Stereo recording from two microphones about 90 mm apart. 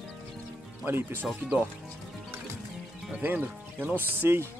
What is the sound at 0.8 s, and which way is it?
Speech, 25° right (ahead or behind).